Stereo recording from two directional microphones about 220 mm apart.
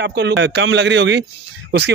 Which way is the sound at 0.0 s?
50° right (ahead or behind).